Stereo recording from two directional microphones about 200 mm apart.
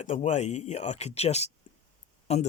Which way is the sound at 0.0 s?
35° left (ahead or behind).